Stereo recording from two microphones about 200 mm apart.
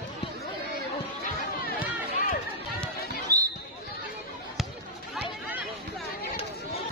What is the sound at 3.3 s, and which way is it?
Basketball bounce, 20° right (ahead or behind).